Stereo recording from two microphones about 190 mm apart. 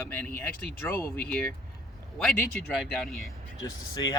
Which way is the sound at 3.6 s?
20° left (ahead or behind).